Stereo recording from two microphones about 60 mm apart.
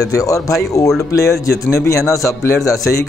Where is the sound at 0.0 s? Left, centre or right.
Left.